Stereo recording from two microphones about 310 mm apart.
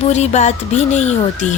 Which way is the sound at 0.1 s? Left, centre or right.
Left.